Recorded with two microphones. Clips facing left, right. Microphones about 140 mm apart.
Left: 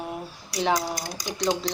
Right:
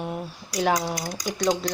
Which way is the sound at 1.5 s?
Centre (ahead or behind).